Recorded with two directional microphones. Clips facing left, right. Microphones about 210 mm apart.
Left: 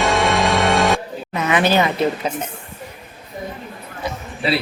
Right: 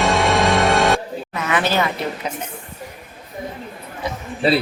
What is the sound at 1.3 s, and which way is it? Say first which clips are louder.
Speech: left 3 dB; 20° left (ahead or behind).